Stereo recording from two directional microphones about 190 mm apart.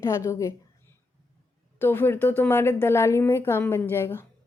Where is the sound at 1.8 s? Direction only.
10° left (ahead or behind).